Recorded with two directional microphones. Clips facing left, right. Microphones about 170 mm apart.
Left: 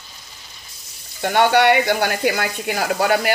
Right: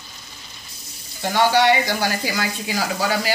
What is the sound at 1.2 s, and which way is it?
Speech, 60° left (ahead or behind).